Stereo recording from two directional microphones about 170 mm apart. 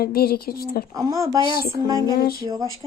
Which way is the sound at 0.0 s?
60° left (ahead or behind).